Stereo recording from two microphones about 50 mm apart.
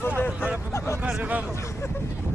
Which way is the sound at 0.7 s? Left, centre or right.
Left.